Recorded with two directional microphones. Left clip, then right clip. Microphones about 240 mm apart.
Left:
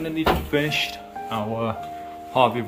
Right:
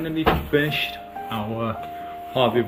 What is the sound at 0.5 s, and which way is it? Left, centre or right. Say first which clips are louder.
Speech: right 1 dB; centre.